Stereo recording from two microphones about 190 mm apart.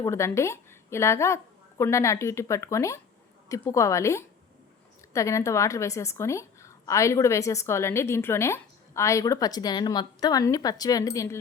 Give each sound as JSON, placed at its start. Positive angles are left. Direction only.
{"t": 0.0, "sound": "a woman's voice", "side_deg": 15}